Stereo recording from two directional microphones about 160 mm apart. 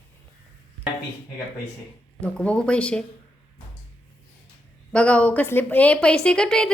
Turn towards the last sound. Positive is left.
turn(degrees=5)  # may be behind; listen again after turning